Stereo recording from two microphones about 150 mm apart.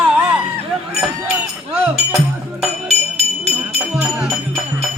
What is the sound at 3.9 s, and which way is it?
Music, 5° right (ahead or behind).